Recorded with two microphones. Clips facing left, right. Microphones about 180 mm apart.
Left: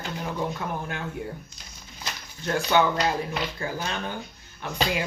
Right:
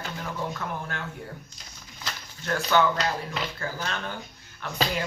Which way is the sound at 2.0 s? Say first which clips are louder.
Left 3 dB; 15° left (ahead or behind).